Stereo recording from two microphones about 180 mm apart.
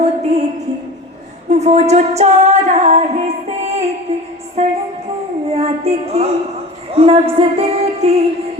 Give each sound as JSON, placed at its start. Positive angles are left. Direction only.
{"t": 0.0, "sound": "a sound", "side_deg": -40}
{"t": 1.5, "sound": "female singing", "side_deg": -40}
{"t": 4.6, "sound": "music", "side_deg": -35}